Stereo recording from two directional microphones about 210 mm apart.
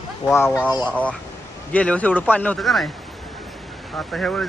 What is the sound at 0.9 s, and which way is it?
Speech, 5° left (ahead or behind).